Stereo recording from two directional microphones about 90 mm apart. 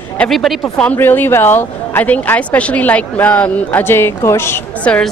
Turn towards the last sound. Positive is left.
turn(degrees=15)  # may be behind; listen again after turning